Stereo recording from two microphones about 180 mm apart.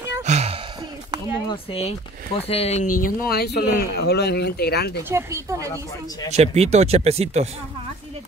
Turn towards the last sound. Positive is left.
turn(degrees=-35)  # may be behind; listen again after turning